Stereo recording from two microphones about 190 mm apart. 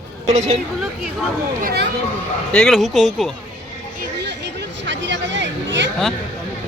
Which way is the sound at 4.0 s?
65° right (ahead or behind).